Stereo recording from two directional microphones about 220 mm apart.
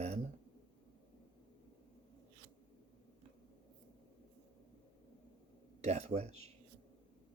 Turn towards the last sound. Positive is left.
turn(degrees=-30)  # may be behind; listen again after turning